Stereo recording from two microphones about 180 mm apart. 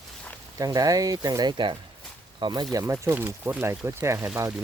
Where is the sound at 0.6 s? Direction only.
20° right (ahead or behind).